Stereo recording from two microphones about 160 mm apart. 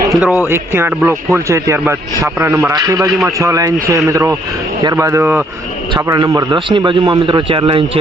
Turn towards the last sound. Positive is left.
turn(degrees=-35)  # may be behind; listen again after turning